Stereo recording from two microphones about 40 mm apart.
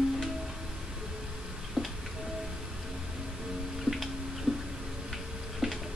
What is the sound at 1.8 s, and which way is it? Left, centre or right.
Music, centre.